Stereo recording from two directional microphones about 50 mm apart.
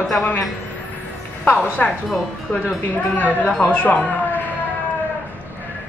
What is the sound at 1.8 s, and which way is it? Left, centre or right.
Speech, left.